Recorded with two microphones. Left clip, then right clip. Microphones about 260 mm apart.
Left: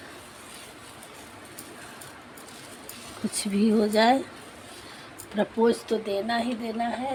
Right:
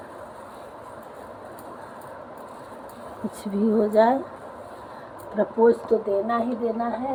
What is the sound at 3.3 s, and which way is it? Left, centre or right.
Speech, left.